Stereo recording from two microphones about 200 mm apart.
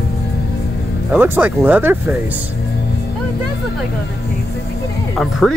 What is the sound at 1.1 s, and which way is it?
Speech, 10° right (ahead or behind).